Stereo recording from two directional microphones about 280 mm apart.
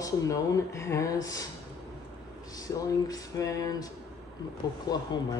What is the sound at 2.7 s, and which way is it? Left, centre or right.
Speech, centre.